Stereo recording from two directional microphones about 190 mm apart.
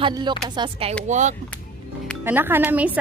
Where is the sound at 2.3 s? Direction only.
10° right (ahead or behind).